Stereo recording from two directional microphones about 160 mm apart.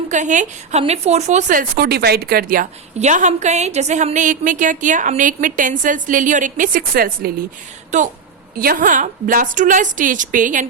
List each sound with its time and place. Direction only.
0.1 s speech: 50° right (ahead or behind); by 7.3 s 65° right (ahead or behind)
7.9 s speech: 50° right (ahead or behind)
8.5 s a woman's voice: 65° right (ahead or behind)